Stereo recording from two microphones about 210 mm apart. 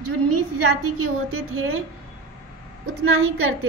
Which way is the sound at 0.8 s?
90° right.